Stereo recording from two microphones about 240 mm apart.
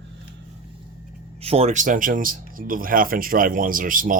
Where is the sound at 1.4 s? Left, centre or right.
Right.